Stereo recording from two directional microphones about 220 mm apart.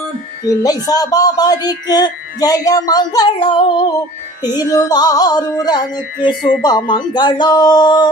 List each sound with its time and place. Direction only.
0.6 s speech: 15° left (ahead or behind)